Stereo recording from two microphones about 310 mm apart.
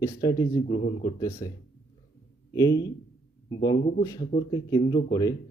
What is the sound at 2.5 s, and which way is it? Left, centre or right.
Speech, centre.